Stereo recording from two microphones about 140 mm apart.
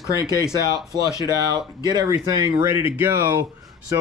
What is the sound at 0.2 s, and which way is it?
Speech, 30° right (ahead or behind).